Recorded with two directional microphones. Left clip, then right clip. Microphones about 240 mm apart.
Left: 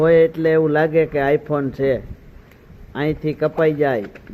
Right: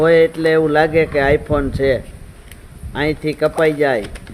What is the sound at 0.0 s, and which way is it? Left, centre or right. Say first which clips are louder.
Speech: right 2 dB; centre.